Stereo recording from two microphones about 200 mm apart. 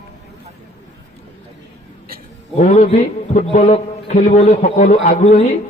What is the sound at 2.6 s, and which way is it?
A man's voice, 30° left (ahead or behind).